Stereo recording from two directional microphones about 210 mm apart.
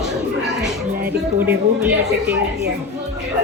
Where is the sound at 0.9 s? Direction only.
45° right (ahead or behind).